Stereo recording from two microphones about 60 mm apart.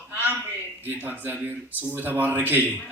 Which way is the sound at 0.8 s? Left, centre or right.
Right.